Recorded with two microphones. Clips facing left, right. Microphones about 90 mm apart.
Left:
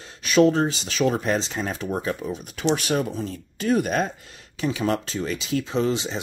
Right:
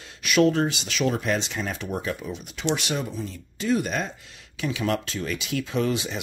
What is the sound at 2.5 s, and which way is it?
Speech, 50° left (ahead or behind).